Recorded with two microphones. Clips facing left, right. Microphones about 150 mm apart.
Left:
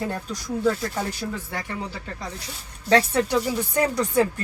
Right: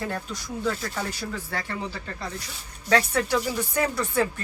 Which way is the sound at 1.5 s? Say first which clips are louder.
Even; 15° left (ahead or behind).